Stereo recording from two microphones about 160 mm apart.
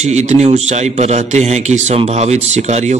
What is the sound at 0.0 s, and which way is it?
A man's voice, 45° right (ahead or behind).